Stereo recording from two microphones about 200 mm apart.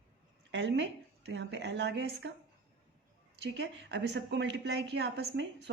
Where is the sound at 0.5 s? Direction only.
60° right (ahead or behind).